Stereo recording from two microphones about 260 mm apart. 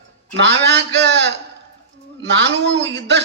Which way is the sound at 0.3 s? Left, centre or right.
Right.